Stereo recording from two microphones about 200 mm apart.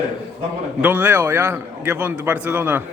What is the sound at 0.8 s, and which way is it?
A man's voice, 10° right (ahead or behind).